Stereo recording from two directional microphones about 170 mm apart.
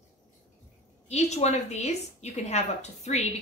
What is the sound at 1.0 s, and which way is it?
A woman's voice, 40° left (ahead or behind).